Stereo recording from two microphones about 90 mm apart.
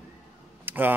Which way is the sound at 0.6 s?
20° right (ahead or behind).